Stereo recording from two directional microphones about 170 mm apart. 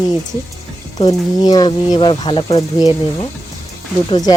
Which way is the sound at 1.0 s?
25° left (ahead or behind).